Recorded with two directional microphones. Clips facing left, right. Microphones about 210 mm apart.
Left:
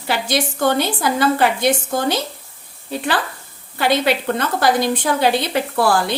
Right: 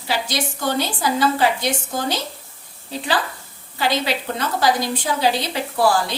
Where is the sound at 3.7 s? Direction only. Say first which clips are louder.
Left 4 dB; 55° left (ahead or behind).